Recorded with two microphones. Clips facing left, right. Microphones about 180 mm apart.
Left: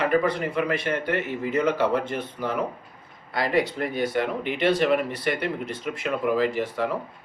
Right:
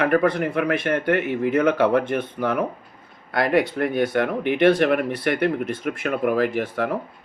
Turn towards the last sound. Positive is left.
turn(degrees=-55)  # may be behind; listen again after turning